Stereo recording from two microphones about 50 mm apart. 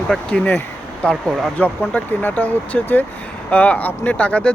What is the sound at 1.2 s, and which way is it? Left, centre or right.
Speech, centre.